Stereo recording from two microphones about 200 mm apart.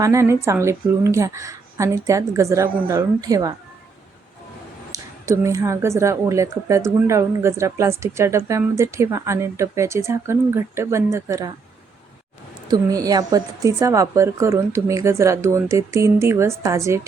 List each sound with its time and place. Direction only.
0.0 s a woman's voice: 15° right (ahead or behind)
4.9 s a woman's voice: 15° right (ahead or behind)
12.7 s a woman's voice: 20° right (ahead or behind)